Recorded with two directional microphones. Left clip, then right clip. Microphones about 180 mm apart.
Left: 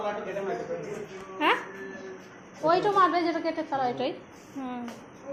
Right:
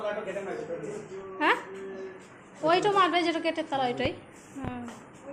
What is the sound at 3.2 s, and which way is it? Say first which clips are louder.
Speech: even; 20° right (ahead or behind).